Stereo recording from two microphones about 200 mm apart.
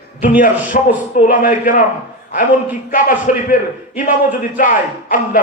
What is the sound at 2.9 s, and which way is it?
Speech, 40° left (ahead or behind).